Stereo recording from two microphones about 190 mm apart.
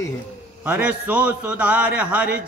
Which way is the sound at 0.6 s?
10° right (ahead or behind).